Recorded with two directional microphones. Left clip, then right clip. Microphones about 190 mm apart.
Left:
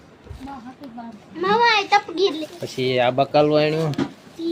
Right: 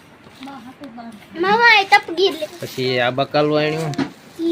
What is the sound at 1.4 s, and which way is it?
Speech, 55° right (ahead or behind).